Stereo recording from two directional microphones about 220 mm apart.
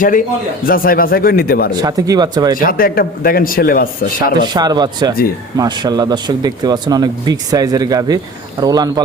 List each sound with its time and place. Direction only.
0.0 s a man's voice: 40° left (ahead or behind)
1.7 s speech: 15° right (ahead or behind)
2.6 s a man's voice: 40° left (ahead or behind)
4.5 s speech: 20° right (ahead or behind)